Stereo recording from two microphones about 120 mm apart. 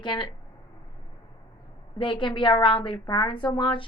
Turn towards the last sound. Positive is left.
turn(degrees=45)  # may be behind; listen again after turning